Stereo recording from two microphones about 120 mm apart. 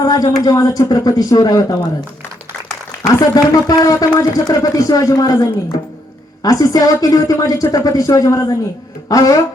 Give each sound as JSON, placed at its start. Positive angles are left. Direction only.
{"t": 0.0, "sound": "speech", "side_deg": 30}
{"t": 3.3, "sound": "speech", "side_deg": 30}